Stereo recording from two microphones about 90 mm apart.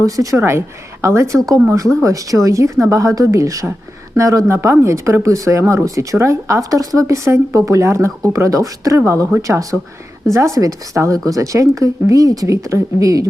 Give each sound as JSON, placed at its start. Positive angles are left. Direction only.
{"t": 0.0, "sound": "speech", "side_deg": -40}